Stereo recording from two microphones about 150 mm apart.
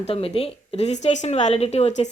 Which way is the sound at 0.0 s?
40° left (ahead or behind).